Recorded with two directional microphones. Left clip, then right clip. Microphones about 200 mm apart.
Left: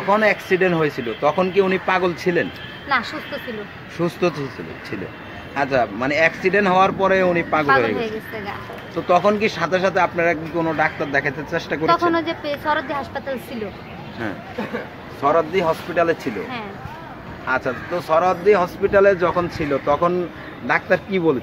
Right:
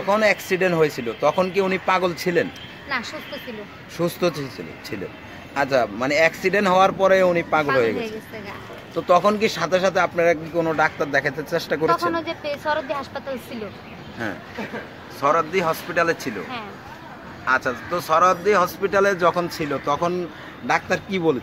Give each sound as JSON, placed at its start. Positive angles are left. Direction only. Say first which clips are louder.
{"t": 0.1, "sound": "speech", "louder": "left 2 dB", "side_deg": -55}
{"t": 2.9, "sound": "speech", "louder": "left 6 dB", "side_deg": 5}
{"t": 4.0, "sound": "speech", "louder": "left 1 dB", "side_deg": -50}
{"t": 5.5, "sound": "speech", "louder": "left 1 dB", "side_deg": -50}
{"t": 8.9, "sound": "speech", "louder": "left 1 dB", "side_deg": -55}
{"t": 11.8, "sound": "speech", "louder": "left 5 dB", "side_deg": 0}
{"t": 15.2, "sound": "speech", "louder": "left 2 dB", "side_deg": -40}
{"t": 17.5, "sound": "speech", "louder": "right 1 dB", "side_deg": -40}